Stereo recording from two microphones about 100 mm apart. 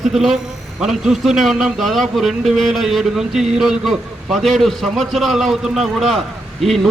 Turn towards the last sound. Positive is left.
turn(degrees=0)  # may be behind; listen again after turning